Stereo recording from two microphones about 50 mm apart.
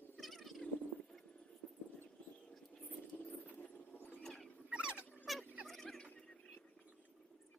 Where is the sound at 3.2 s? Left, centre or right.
Left.